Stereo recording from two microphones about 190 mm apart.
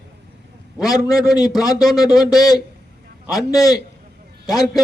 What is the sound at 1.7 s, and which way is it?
A man's voice, 20° left (ahead or behind).